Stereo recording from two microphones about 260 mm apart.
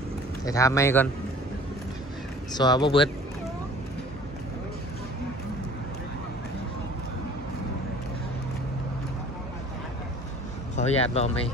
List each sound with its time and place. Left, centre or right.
0.5 s speech: centre
2.5 s speech: centre
10.8 s speech: left